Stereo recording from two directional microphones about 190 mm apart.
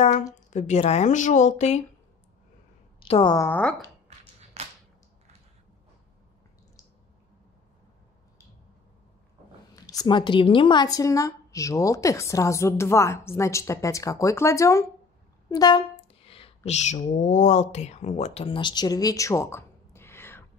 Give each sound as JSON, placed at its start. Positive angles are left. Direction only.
{"t": 0.0, "sound": "speech", "side_deg": 40}
{"t": 3.0, "sound": "speech", "side_deg": 25}
{"t": 3.3, "sound": "a woman's voice", "side_deg": 10}
{"t": 4.6, "sound": "whip", "side_deg": -35}
{"t": 10.0, "sound": "a woman's voice", "side_deg": 25}